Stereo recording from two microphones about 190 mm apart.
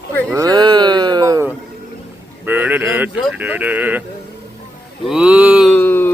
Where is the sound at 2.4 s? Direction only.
10° right (ahead or behind).